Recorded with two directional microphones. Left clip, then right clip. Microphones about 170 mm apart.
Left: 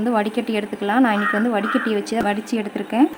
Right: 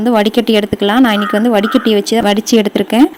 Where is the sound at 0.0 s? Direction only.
35° right (ahead or behind).